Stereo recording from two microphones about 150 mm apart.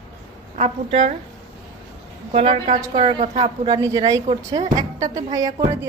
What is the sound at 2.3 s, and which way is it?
Speech, 40° right (ahead or behind).